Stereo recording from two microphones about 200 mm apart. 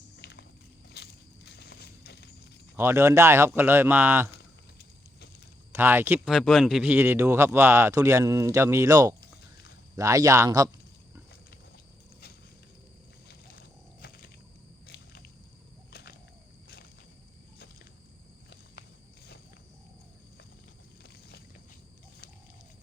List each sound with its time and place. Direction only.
0.2 s walk: 55° left (ahead or behind)
1.5 s horse: 60° left (ahead or behind)
2.7 s speech: 10° right (ahead or behind)
5.7 s speech: 10° right (ahead or behind)
13.2 s a sound: 50° left (ahead or behind)
14.8 s squish: 55° left (ahead or behind)
15.9 s bird: 50° left (ahead or behind)
21.0 s boat: 55° left (ahead or behind)